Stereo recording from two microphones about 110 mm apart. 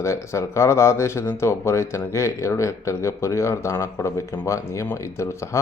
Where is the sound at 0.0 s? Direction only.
25° left (ahead or behind).